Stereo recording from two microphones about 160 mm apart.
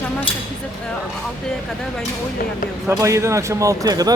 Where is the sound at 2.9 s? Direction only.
15° right (ahead or behind).